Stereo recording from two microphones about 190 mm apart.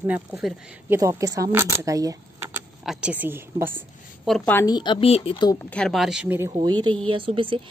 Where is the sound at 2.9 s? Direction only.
5° right (ahead or behind).